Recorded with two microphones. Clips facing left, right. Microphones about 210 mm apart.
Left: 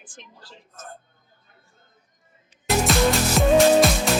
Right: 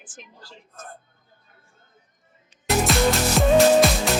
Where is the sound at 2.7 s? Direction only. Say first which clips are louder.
Even; centre (ahead or behind).